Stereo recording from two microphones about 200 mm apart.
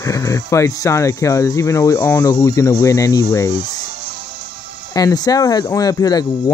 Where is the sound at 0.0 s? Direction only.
15° left (ahead or behind).